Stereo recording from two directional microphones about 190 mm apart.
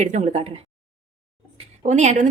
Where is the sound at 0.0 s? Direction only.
40° right (ahead or behind).